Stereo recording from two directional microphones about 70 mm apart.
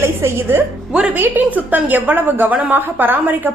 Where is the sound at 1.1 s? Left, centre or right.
Right.